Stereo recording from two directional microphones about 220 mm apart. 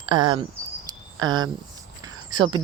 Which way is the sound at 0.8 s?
20° right (ahead or behind).